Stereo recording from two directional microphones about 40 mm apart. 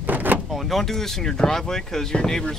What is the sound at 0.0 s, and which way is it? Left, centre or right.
Door, right.